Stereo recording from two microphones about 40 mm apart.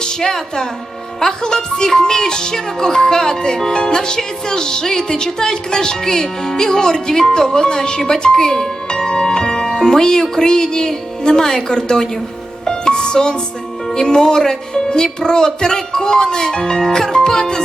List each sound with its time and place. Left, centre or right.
0.0 s a woman's voice: centre
12.6 s music: centre
13.9 s speech: centre